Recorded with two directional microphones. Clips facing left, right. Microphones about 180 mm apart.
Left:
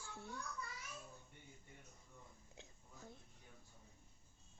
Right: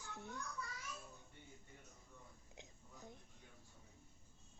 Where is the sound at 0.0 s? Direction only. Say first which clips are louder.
Even; 20° right (ahead or behind).